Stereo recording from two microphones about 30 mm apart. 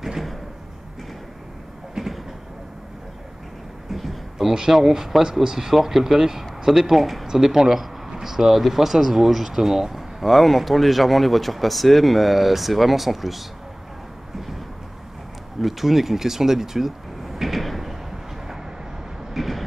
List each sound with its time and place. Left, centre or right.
2.0 s vehicle: right
3.9 s a sound: centre
5.2 s speech: centre
7.2 s speech: centre
15.6 s speech: centre
19.3 s vehicle: centre